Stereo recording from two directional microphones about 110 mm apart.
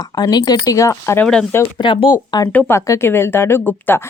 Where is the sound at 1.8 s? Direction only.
50° left (ahead or behind).